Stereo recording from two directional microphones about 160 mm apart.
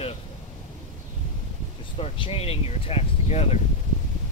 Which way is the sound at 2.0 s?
35° left (ahead or behind).